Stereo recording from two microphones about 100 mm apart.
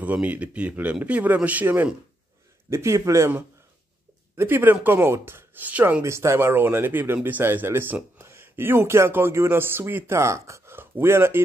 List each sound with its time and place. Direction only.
0.0 s a man's voice: 15° right (ahead or behind)
2.7 s speech: 30° right (ahead or behind)
4.4 s speech: 20° right (ahead or behind)
6.0 s speech: 30° right (ahead or behind)